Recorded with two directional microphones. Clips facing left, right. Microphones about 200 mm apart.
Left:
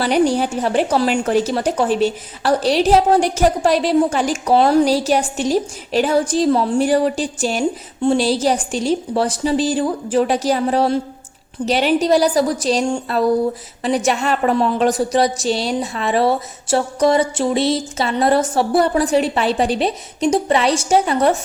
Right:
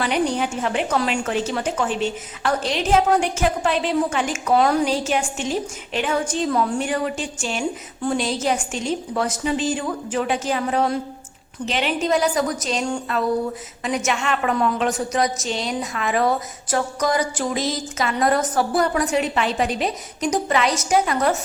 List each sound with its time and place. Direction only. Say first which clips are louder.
0.0 s a woman's voice: left 6 dB; 35° left (ahead or behind)